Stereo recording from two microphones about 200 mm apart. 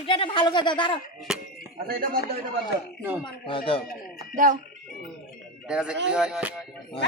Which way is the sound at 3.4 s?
25° left (ahead or behind).